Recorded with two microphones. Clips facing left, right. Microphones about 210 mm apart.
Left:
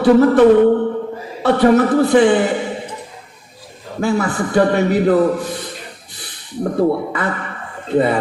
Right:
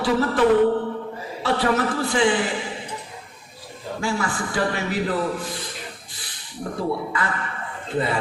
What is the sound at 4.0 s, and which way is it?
A man's voice, 60° left (ahead or behind).